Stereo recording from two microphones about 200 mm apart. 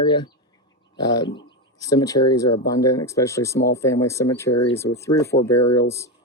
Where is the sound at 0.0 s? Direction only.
20° left (ahead or behind).